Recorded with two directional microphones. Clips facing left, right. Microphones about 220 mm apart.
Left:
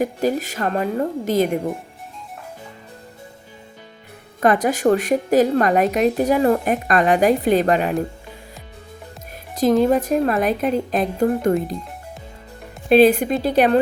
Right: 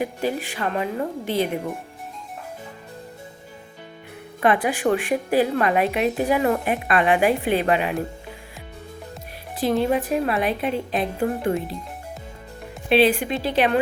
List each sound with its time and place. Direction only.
0.0 s a woman's voice: 40° left (ahead or behind)
4.4 s a woman's voice: 40° left (ahead or behind)
9.6 s a woman's voice: 45° left (ahead or behind)
12.9 s a woman's voice: 45° left (ahead or behind)